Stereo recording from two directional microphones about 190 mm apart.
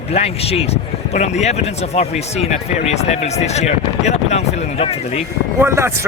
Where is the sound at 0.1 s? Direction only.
35° left (ahead or behind).